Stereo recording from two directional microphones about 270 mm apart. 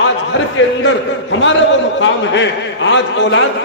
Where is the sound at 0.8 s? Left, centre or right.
Left.